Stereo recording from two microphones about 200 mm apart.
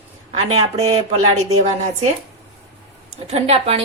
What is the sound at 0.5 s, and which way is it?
Speech, 35° right (ahead or behind).